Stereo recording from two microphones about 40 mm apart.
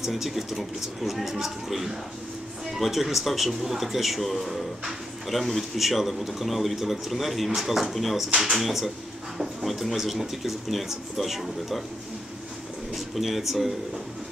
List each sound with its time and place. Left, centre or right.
0.0 s a man's voice: centre
12.9 s a man's voice: centre